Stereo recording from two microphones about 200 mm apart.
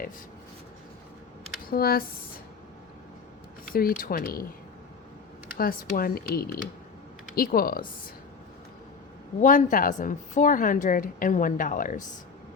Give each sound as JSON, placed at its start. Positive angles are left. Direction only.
{"t": 1.7, "sound": "speech", "side_deg": 50}
{"t": 3.7, "sound": "speech", "side_deg": 45}
{"t": 5.5, "sound": "speech", "side_deg": 45}
{"t": 9.4, "sound": "speech", "side_deg": 40}